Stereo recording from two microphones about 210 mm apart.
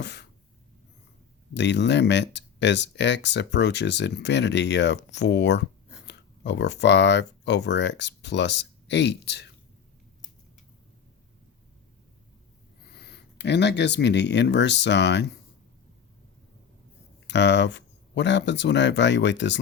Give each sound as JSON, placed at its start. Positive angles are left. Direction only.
{"t": 0.0, "sound": "a sound", "side_deg": 55}
{"t": 1.5, "sound": "speech", "side_deg": 55}
{"t": 12.9, "sound": "speech", "side_deg": 50}
{"t": 17.2, "sound": "speech", "side_deg": 55}